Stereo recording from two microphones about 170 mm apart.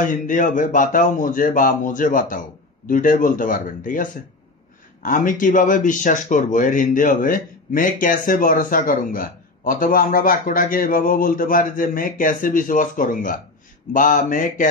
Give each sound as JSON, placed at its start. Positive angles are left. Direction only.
{"t": 0.0, "sound": "speech", "side_deg": 50}